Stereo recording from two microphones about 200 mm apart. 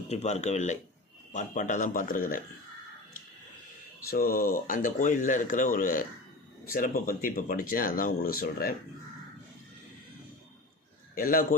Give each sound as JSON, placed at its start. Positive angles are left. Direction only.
{"t": 0.1, "sound": "speech", "side_deg": 35}
{"t": 4.1, "sound": "speech", "side_deg": 45}
{"t": 11.1, "sound": "speech", "side_deg": 45}